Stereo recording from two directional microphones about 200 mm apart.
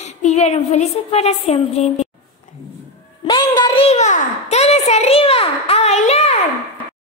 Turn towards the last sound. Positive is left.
turn(degrees=30)  # may be behind; listen again after turning